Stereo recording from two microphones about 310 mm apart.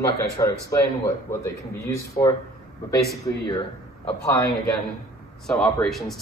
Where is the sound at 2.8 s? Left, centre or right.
Centre.